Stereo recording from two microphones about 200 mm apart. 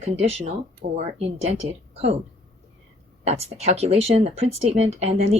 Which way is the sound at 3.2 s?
30° right (ahead or behind).